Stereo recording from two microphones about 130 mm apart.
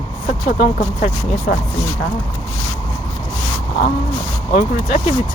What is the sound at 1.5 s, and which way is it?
Speech, 90° left.